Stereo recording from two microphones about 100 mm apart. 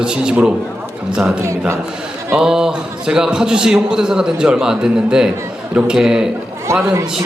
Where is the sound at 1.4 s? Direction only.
25° right (ahead or behind).